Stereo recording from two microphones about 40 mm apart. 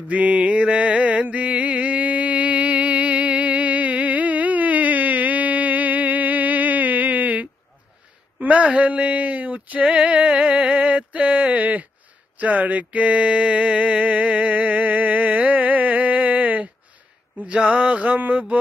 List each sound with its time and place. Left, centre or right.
0.1 s mantra: right
8.4 s speech: right
10.0 s music: right
10.7 s a sound: right